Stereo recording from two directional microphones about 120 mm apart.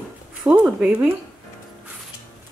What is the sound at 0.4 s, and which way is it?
Speech, 10° right (ahead or behind).